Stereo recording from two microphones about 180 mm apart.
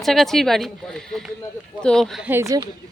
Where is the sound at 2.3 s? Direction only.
15° right (ahead or behind).